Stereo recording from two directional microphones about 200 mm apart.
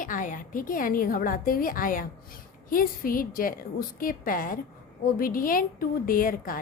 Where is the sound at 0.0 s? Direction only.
40° left (ahead or behind).